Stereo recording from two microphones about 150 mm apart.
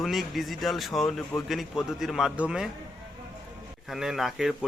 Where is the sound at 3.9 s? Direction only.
5° right (ahead or behind).